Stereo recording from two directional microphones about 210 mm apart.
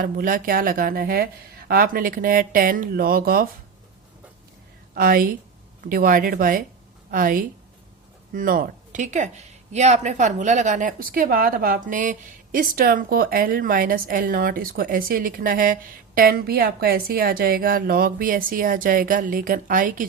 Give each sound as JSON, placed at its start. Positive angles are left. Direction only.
{"t": 0.0, "sound": "speech", "side_deg": -40}
{"t": 4.9, "sound": "speech", "side_deg": -45}